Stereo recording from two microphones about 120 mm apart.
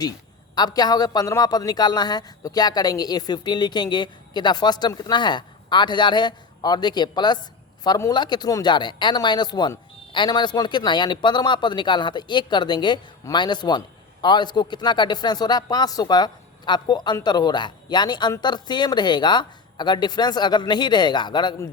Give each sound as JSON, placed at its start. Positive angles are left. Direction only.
{"t": 0.5, "sound": "speech", "side_deg": 35}